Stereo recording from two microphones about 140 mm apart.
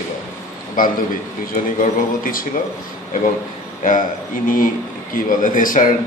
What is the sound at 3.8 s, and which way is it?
Speech, 80° left.